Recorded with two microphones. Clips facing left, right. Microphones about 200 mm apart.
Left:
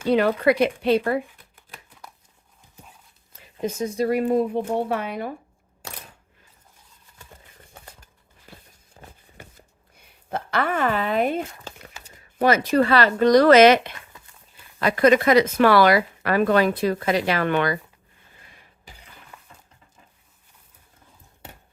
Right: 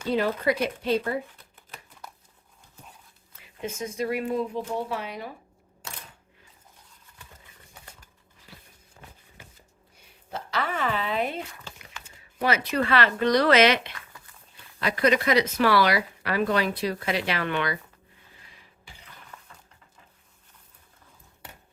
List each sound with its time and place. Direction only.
0.1 s a woman's voice: 70° left (ahead or behind)
3.6 s speech: 35° left (ahead or behind)
4.3 s speech: 55° left (ahead or behind)
9.0 s a sound: 30° left (ahead or behind)
10.3 s speech: 55° left (ahead or behind)
14.1 s dog: 20° left (ahead or behind)
14.8 s speech: 50° left (ahead or behind)
19.3 s a sound: 10° left (ahead or behind)